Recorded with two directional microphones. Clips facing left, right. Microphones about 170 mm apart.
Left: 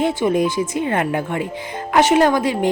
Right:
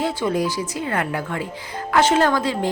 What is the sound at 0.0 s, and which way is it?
A woman's voice, 20° left (ahead or behind).